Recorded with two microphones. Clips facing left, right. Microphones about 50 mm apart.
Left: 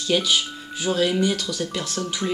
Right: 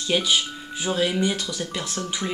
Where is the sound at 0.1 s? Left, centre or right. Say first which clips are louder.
Left 1 dB; centre.